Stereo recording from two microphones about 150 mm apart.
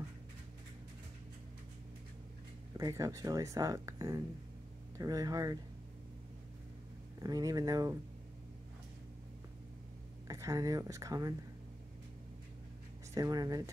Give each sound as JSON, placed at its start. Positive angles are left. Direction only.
{"t": 2.8, "sound": "speech", "side_deg": -20}
{"t": 7.2, "sound": "speech", "side_deg": -25}
{"t": 10.2, "sound": "speech", "side_deg": -20}
{"t": 13.1, "sound": "speech", "side_deg": -25}